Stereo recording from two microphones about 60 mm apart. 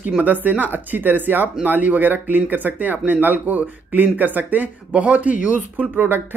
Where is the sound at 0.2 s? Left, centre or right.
Right.